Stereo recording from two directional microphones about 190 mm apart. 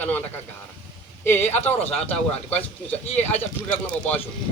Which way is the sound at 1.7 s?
30° left (ahead or behind).